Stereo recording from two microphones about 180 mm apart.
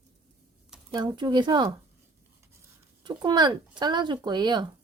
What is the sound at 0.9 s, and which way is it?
Speech, 25° right (ahead or behind).